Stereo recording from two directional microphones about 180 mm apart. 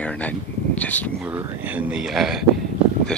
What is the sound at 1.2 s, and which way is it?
Speech, 10° right (ahead or behind).